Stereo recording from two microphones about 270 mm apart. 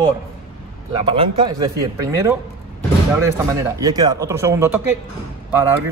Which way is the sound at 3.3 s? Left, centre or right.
Centre.